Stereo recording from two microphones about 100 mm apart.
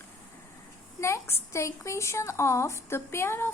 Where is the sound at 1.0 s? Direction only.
30° left (ahead or behind).